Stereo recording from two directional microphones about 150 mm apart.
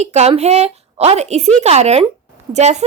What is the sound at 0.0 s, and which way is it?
A woman's voice, 45° right (ahead or behind).